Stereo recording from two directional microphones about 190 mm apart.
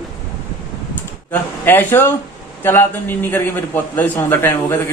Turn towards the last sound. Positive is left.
turn(degrees=10)  # may be behind; listen again after turning